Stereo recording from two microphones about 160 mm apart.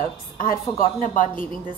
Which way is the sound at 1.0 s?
55° left (ahead or behind).